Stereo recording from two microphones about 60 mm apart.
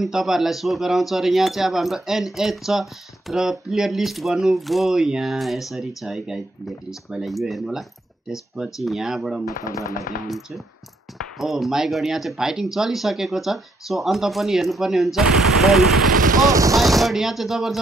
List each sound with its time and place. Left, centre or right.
0.0 s speech: centre
16.5 s a sound: right
16.8 s speech: centre